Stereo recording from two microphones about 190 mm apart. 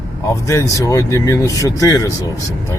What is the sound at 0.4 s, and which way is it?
Speech, 15° left (ahead or behind).